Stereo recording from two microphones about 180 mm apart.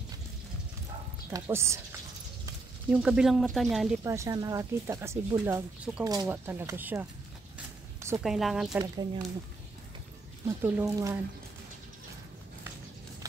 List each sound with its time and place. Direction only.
1.3 s speech: 15° right (ahead or behind)
2.9 s speech: 5° right (ahead or behind)
4.0 s speech: 15° right (ahead or behind)
7.5 s a sound: 15° right (ahead or behind)
8.2 s speech: centre (ahead or behind)
8.7 s speech: 20° right (ahead or behind)
10.4 s speech: 10° right (ahead or behind)